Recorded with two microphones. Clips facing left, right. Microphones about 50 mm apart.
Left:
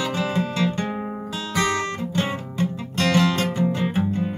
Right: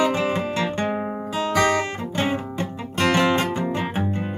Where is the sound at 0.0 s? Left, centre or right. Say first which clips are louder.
Right 3 dB; right.